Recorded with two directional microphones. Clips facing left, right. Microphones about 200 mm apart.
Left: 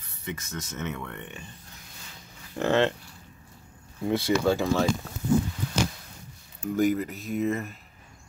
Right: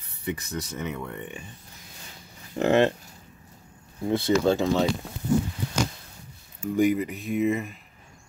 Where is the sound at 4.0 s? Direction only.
15° right (ahead or behind).